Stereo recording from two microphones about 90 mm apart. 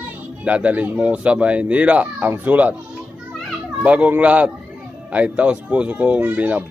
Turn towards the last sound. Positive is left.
turn(degrees=-15)  # may be behind; listen again after turning